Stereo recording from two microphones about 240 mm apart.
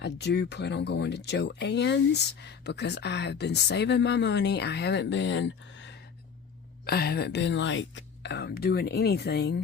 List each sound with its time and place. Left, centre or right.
0.0 s speech: left